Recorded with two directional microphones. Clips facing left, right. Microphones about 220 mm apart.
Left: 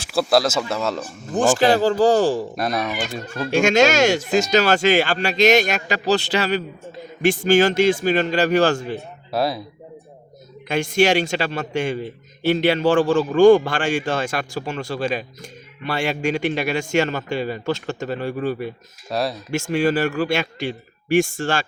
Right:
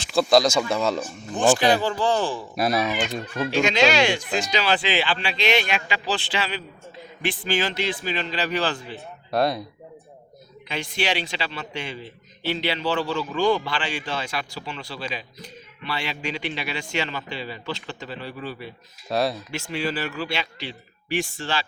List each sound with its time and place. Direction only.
0.0 s speech: 5° left (ahead or behind)
1.3 s speech: 45° left (ahead or behind)
2.6 s speech: 5° right (ahead or behind)
3.5 s a man's voice: 45° left (ahead or behind)
9.0 s speech: 5° left (ahead or behind)
10.7 s a man's voice: 45° left (ahead or behind)
19.0 s speech: centre (ahead or behind)
19.5 s a man's voice: 45° left (ahead or behind)